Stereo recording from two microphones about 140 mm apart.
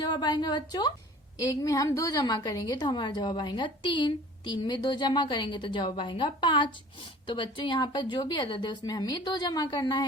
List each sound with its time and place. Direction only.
0.0 s a woman's voice: 30° left (ahead or behind)